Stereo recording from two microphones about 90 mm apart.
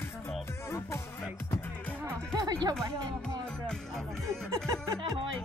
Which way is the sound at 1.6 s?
20° left (ahead or behind).